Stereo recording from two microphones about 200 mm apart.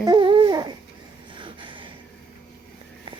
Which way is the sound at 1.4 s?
25° right (ahead or behind).